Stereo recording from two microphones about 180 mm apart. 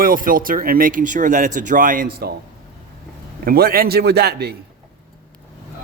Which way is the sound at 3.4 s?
55° right (ahead or behind).